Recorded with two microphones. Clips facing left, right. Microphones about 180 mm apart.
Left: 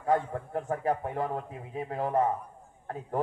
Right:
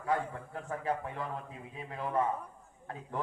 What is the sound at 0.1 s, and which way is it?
A man's voice, 40° left (ahead or behind).